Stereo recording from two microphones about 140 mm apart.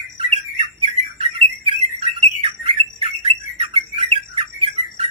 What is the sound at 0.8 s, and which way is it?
Bird, 40° right (ahead or behind).